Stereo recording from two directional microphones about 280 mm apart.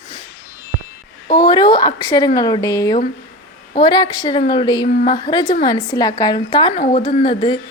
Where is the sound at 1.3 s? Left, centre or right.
Centre.